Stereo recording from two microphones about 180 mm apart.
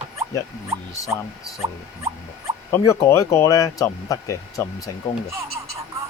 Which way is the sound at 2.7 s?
15° left (ahead or behind).